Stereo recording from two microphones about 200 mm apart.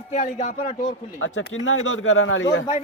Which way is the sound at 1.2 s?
80° left.